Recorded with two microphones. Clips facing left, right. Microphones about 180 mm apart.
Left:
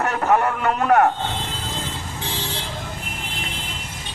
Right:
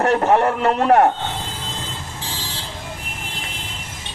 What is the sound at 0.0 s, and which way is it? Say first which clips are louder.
A man's voice: right 4 dB; 30° right (ahead or behind).